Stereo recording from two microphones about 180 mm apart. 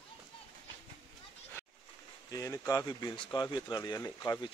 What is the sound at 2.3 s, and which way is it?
Speech, 20° left (ahead or behind).